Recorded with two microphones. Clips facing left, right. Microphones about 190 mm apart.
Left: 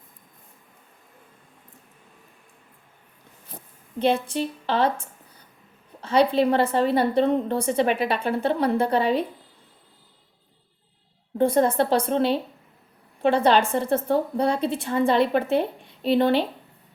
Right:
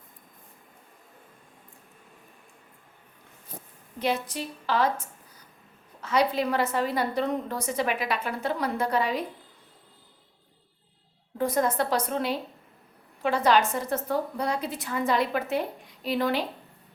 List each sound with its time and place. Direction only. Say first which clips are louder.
3.9 s a woman's voice: left 6 dB; 30° left (ahead or behind)
11.3 s a woman's voice: left 6 dB; 30° left (ahead or behind)